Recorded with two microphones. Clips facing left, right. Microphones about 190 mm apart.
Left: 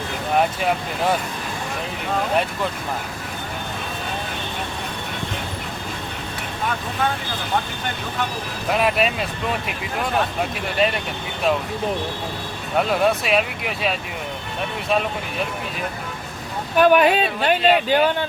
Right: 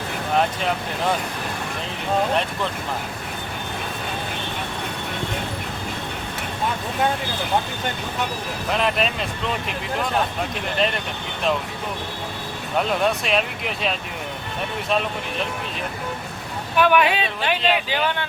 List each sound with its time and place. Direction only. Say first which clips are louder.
8.8 s speech: left 3 dB; 5° left (ahead or behind)
10.8 s speech: left 3 dB; 5° left (ahead or behind)
13.2 s speech: left 2 dB; 5° left (ahead or behind)
16.7 s speech: left 3 dB; 40° left (ahead or behind)